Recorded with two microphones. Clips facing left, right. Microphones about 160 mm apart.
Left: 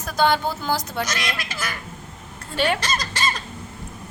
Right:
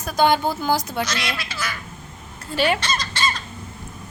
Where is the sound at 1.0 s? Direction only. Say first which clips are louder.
Right 1 dB; 45° left (ahead or behind).